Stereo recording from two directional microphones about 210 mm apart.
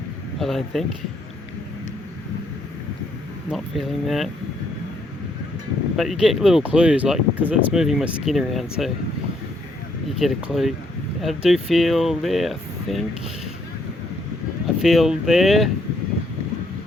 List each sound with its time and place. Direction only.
0.3 s speech: centre (ahead or behind)
3.5 s speech: centre (ahead or behind)
6.0 s speech: centre (ahead or behind)
10.2 s speech: centre (ahead or behind)
14.8 s speech: centre (ahead or behind)